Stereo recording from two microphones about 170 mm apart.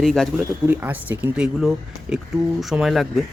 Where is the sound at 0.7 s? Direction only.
10° right (ahead or behind).